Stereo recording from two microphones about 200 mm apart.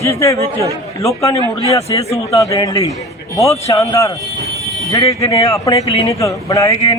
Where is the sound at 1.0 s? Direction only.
15° left (ahead or behind).